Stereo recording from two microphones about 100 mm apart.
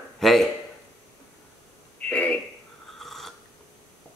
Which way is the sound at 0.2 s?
Centre (ahead or behind).